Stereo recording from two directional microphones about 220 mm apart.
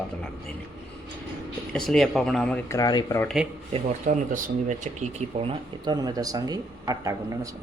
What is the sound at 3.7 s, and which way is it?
Speech, 35° right (ahead or behind).